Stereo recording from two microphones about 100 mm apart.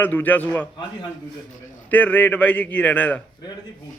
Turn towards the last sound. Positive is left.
turn(degrees=15)  # may be behind; listen again after turning